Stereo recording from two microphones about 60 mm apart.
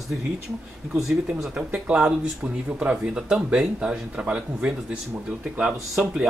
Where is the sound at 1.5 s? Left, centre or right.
Centre.